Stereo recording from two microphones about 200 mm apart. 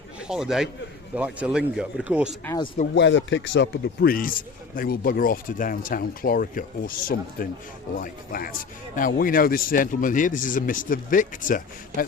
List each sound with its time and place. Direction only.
0.2 s a man's voice: 5° right (ahead or behind)
2.9 s a man's voice: 65° left (ahead or behind); by 12.0 s 40° left (ahead or behind)